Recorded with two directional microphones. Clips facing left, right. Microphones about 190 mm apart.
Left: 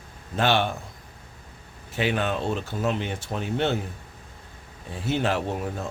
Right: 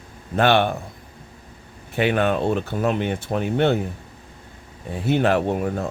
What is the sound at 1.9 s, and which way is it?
Speech, 60° right (ahead or behind).